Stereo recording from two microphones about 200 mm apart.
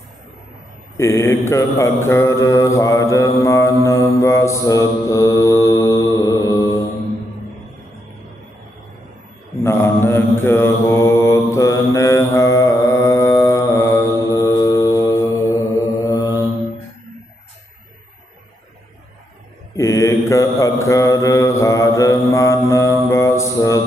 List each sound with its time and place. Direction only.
0.9 s mantra: 15° left (ahead or behind)
9.6 s mantra: 10° left (ahead or behind)
19.7 s mantra: 15° left (ahead or behind)